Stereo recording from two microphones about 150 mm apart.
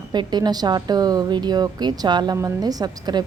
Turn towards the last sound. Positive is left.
turn(degrees=-25)  # may be behind; listen again after turning